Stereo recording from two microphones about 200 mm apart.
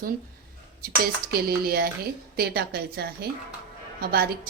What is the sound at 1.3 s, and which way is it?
A woman's voice, 50° right (ahead or behind).